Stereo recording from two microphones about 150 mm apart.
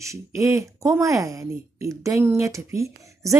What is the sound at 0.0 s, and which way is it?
Speech, 20° right (ahead or behind).